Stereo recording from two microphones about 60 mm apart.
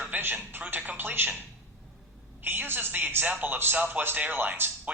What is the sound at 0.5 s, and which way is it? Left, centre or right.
Speech, right.